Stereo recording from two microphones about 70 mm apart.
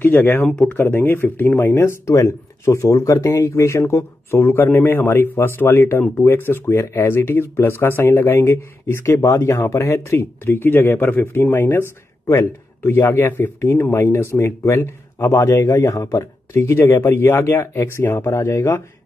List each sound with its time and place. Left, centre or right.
0.0 s speech: left
0.5 s speech: centre
0.7 s speech: left
3.4 s speech: left
12.8 s speech: left
14.0 s speech: left